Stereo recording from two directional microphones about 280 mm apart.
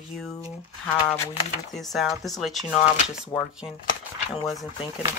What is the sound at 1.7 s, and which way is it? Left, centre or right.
Speech, centre.